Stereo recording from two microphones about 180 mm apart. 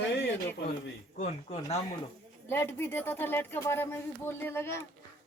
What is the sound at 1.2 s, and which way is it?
Speech, 40° left (ahead or behind).